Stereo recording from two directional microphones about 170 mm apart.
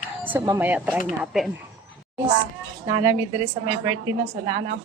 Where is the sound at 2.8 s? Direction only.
15° right (ahead or behind).